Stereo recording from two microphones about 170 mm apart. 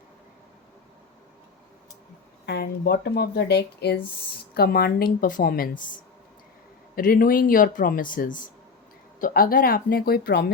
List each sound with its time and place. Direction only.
2.5 s a woman's voice: 80° left